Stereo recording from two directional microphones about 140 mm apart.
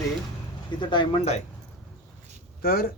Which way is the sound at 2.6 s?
90° left.